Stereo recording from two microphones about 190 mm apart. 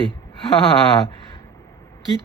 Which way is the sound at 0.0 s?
30° left (ahead or behind).